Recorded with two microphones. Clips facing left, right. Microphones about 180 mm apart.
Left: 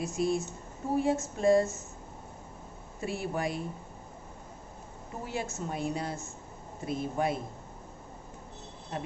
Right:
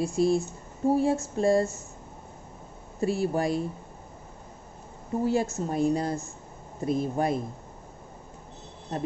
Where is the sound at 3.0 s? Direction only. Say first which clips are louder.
Right 7 dB; 40° right (ahead or behind).